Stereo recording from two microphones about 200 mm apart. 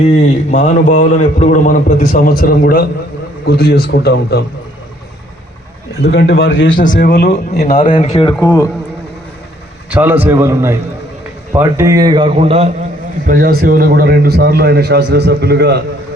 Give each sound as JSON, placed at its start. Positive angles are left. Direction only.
{"t": 0.0, "sound": "a man's voice", "side_deg": 35}
{"t": 6.0, "sound": "speech", "side_deg": 55}
{"t": 6.7, "sound": "a man's voice", "side_deg": 40}
{"t": 7.0, "sound": "speech", "side_deg": 55}
{"t": 7.8, "sound": "speech", "side_deg": 25}
{"t": 9.9, "sound": "a man's voice", "side_deg": -10}
{"t": 13.2, "sound": "a man's voice", "side_deg": -45}